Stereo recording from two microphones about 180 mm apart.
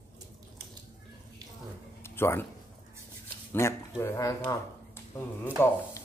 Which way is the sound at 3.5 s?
15° left (ahead or behind).